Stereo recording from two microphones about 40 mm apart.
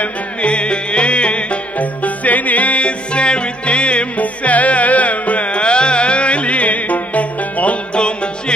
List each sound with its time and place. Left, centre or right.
0.0 s music: left